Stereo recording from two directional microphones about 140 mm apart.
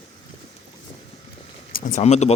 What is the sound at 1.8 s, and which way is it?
Speech, 55° left (ahead or behind).